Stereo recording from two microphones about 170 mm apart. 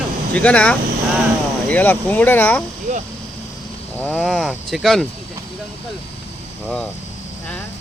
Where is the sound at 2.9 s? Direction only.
40° right (ahead or behind).